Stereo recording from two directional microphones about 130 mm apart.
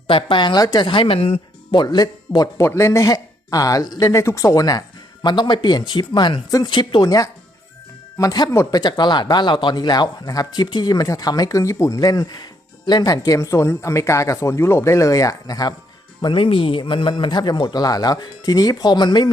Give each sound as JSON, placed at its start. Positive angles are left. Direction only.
{"t": 0.1, "sound": "a man's voice", "side_deg": 40}
{"t": 1.7, "sound": "a man's voice", "side_deg": 30}
{"t": 2.6, "sound": "a man's voice", "side_deg": 20}
{"t": 16.2, "sound": "a man's voice", "side_deg": 40}